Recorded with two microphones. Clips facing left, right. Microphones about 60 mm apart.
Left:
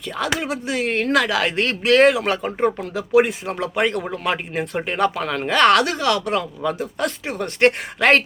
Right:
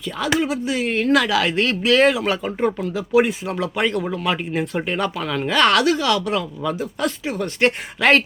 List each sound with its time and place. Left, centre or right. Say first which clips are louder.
0.2 s speech: right 3 dB; left